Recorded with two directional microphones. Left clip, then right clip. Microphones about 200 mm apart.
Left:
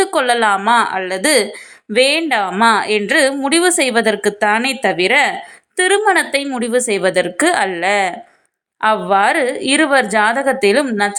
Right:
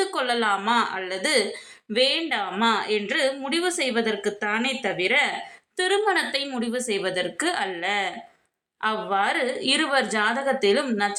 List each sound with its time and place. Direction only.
0.0 s a woman's voice: 35° left (ahead or behind)